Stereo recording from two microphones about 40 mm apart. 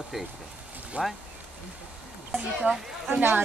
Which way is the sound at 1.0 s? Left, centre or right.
Right.